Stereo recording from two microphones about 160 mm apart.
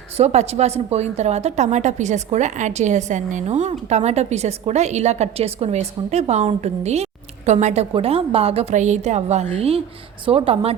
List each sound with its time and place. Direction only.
0.2 s a woman's voice: 40° right (ahead or behind)